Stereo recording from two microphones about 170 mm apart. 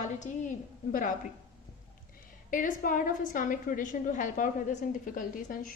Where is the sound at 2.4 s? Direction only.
50° left (ahead or behind).